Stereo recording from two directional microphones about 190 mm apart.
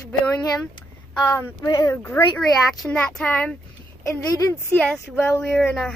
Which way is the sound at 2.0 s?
10° left (ahead or behind).